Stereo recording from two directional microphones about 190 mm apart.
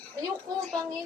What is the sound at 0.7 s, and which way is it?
Speech, 5° left (ahead or behind).